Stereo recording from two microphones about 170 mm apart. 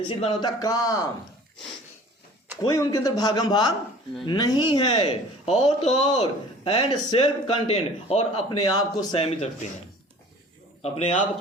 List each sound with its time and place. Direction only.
0.1 s speech: 25° left (ahead or behind)
2.6 s a man's voice: 20° left (ahead or behind); by 8.3 s 40° left (ahead or behind)
8.4 s speech: 25° left (ahead or behind)
10.8 s a man's voice: 40° left (ahead or behind)